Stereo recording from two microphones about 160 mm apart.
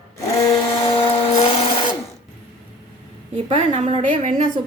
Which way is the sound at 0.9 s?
30° left (ahead or behind).